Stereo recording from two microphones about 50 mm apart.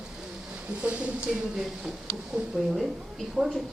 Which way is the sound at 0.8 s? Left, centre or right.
Right.